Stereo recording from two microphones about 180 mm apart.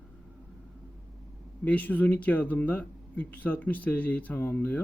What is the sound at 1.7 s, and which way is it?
Speech, 10° left (ahead or behind).